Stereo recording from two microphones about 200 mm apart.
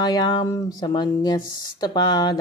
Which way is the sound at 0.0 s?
20° left (ahead or behind).